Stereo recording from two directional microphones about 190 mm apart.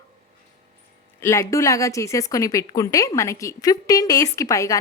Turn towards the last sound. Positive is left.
turn(degrees=15)  # may be behind; listen again after turning